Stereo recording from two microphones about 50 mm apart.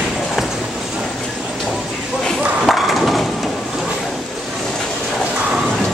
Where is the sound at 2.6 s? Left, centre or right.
Centre.